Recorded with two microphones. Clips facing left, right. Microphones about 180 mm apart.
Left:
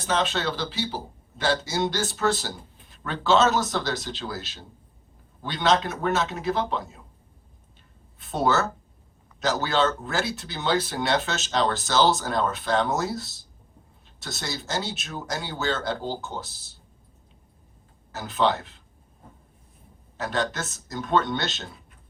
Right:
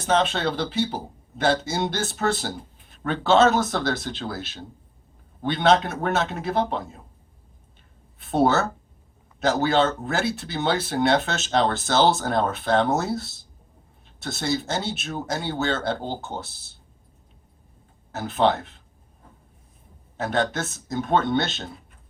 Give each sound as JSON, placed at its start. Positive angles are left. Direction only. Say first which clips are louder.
{"t": 0.0, "sound": "speech", "louder": "right 3 dB", "side_deg": -55}
{"t": 8.2, "sound": "speech", "louder": "right 3 dB", "side_deg": -55}
{"t": 18.1, "sound": "speech", "louder": "right 3 dB", "side_deg": -55}
{"t": 20.1, "sound": "speech", "louder": "right 3 dB", "side_deg": -55}